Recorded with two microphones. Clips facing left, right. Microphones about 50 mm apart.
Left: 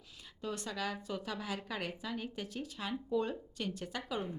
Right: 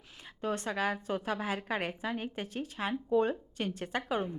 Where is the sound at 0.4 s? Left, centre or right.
Right.